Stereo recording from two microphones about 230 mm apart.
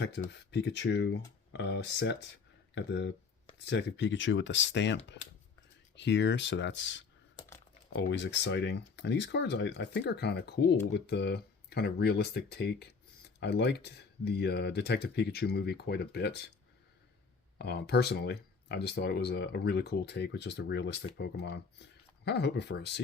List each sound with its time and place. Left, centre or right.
0.0 s speech: left
6.0 s speech: left
17.6 s speech: left